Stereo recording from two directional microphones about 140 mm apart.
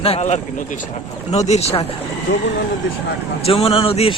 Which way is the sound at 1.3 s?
50° left (ahead or behind).